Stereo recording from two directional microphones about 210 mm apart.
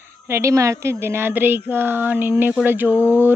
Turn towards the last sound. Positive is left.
turn(degrees=-10)  # may be behind; listen again after turning